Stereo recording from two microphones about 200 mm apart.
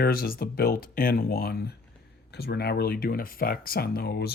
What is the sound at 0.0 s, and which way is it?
Speech, 50° left (ahead or behind).